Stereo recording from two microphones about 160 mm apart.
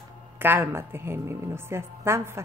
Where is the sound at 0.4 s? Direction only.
15° right (ahead or behind).